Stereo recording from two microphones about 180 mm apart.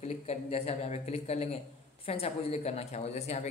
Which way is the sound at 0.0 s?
35° left (ahead or behind).